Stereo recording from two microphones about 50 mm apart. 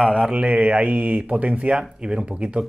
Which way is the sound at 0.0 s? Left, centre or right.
Right.